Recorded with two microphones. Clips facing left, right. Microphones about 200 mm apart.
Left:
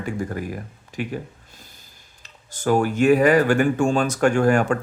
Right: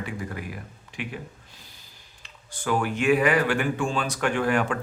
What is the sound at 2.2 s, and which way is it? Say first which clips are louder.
Speech: left 7 dB; 40° left (ahead or behind).